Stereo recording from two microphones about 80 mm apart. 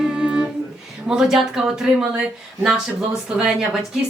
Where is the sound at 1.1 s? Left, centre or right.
Centre.